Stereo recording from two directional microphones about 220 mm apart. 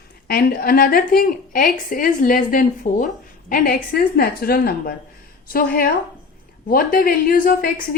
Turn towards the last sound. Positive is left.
turn(degrees=40)  # may be behind; listen again after turning